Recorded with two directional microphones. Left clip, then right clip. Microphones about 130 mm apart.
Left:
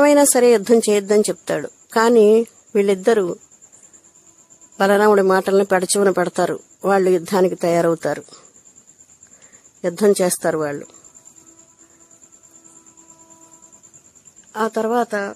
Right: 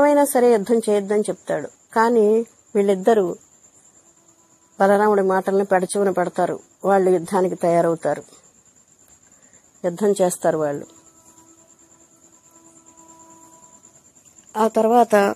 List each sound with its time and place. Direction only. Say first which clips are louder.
0.0 s speech: left 2 dB; 25° left (ahead or behind)
2.8 s speech: left 1 dB; 20° left (ahead or behind)
4.7 s speech: left 1 dB; 20° left (ahead or behind)
5.0 s speech: left 3 dB; 35° left (ahead or behind)
9.8 s speech: left 3 dB; 25° left (ahead or behind)
10.4 s speech: even; 20° left (ahead or behind)
14.5 s speech: right 3 dB; centre (ahead or behind)
15.0 s speech: right 8 dB; 35° right (ahead or behind)